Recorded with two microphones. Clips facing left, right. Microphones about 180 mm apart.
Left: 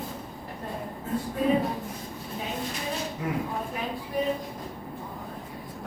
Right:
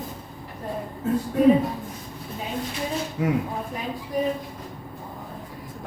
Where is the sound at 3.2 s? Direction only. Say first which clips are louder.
Right 9 dB; 80° right.